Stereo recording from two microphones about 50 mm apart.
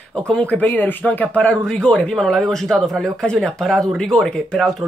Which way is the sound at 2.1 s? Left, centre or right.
Centre.